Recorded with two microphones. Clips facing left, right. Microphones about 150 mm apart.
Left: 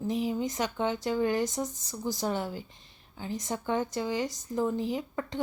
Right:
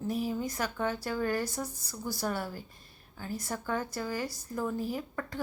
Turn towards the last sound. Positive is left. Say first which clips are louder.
# left 3 dB
turn(degrees=20)  # may be behind; listen again after turning